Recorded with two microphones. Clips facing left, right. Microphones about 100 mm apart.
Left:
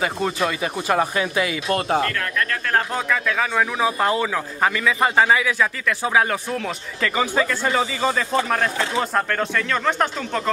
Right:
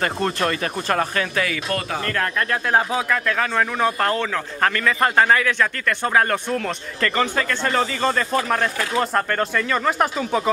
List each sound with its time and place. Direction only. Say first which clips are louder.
0.0 s speech: even; 5° left (ahead or behind); by 1.8 s 20° left (ahead or behind)
1.9 s speech: left 6 dB; 35° left (ahead or behind)
2.1 s speech: right 2 dB; 30° right (ahead or behind)
2.7 s speech: right 2 dB; centre (ahead or behind)